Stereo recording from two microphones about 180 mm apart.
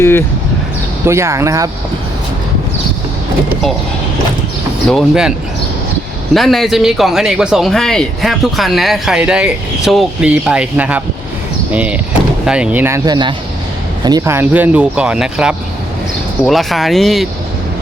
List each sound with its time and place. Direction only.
0.0 s speech: 15° left (ahead or behind)
1.0 s speech: 15° right (ahead or behind)
4.9 s speech: centre (ahead or behind)
6.3 s speech: centre (ahead or behind)